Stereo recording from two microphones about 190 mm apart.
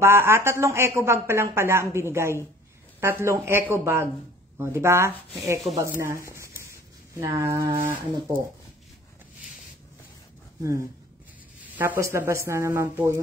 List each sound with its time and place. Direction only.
0.0 s speech: 15° right (ahead or behind)
11.7 s speech: 10° right (ahead or behind)